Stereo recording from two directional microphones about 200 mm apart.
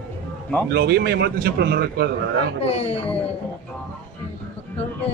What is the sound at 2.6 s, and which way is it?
Speech, 30° left (ahead or behind).